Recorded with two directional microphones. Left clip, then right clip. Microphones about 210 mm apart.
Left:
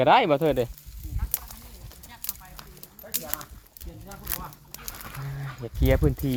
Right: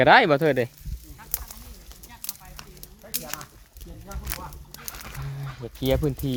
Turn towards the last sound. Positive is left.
turn(degrees=30)  # may be behind; listen again after turning